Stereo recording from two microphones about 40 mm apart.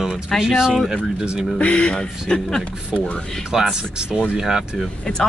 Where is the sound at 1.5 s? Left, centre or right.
Left.